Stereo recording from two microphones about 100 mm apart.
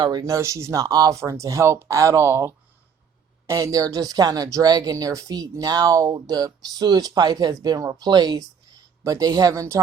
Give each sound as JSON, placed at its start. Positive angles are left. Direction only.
{"t": 0.0, "sound": "speech", "side_deg": -45}
{"t": 0.3, "sound": "speech", "side_deg": -30}